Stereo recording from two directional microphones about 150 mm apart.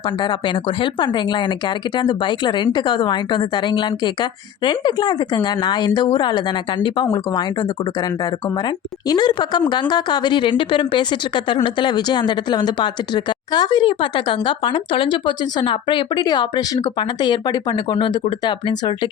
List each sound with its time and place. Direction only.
0.2 s speech: 30° left (ahead or behind)